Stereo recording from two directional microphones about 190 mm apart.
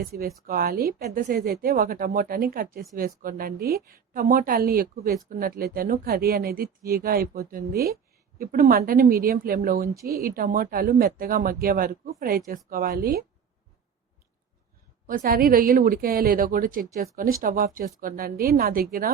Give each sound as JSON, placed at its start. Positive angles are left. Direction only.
{"t": 0.0, "sound": "speech", "side_deg": -55}
{"t": 15.0, "sound": "speech", "side_deg": -50}